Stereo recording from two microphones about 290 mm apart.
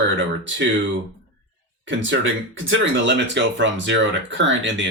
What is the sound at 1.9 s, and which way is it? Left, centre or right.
Speech, right.